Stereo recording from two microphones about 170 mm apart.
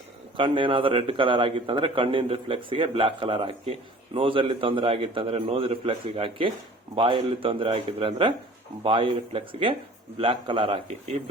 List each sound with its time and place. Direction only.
0.3 s a man's voice: 30° right (ahead or behind)